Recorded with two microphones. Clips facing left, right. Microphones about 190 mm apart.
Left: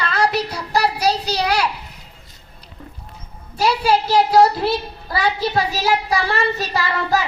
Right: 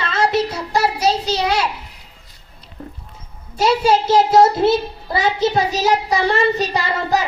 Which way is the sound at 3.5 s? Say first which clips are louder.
Right 2 dB; 25° right (ahead or behind).